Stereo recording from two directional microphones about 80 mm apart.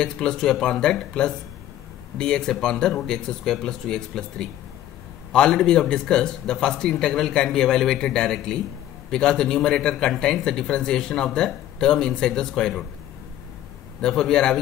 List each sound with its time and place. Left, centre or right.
0.0 s a man's voice: centre
14.0 s a man's voice: centre